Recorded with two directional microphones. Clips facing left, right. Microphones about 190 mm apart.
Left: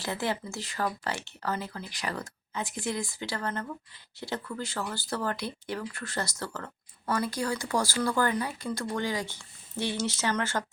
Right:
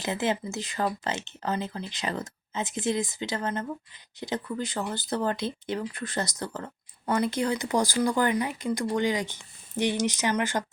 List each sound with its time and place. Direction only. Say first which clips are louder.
0.0 s speech: right 4 dB; 20° right (ahead or behind)